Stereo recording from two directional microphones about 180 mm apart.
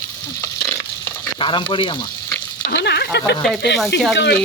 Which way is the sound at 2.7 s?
65° left (ahead or behind).